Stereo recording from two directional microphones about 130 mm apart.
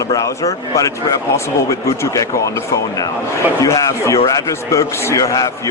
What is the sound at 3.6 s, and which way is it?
A man's voice, 25° left (ahead or behind).